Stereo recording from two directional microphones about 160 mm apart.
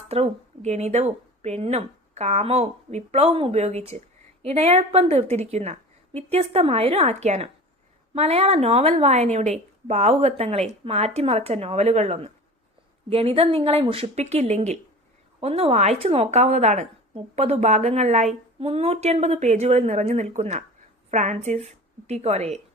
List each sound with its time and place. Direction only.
0.1 s a woman's voice: 40° right (ahead or behind)